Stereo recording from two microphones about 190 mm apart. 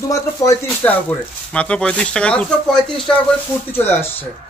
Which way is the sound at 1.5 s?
5° left (ahead or behind).